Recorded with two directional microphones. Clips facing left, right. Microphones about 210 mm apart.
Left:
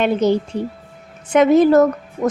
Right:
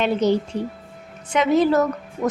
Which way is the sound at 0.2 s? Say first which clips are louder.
Left 3 dB; 50° left (ahead or behind).